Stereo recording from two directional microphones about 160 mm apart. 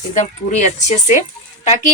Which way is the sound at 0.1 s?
45° left (ahead or behind).